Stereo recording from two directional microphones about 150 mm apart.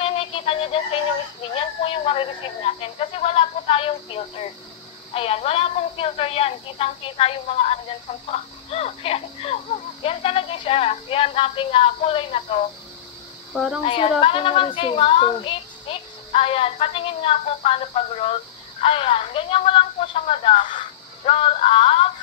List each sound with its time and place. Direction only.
0.0 s music: 40° left (ahead or behind)
1.4 s a woman's voice: 35° left (ahead or behind)
13.5 s speech: centre (ahead or behind)
13.8 s a woman's voice: 35° left (ahead or behind)